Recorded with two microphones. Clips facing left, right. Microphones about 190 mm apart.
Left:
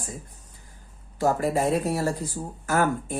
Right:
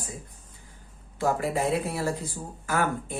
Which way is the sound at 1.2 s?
40° left (ahead or behind).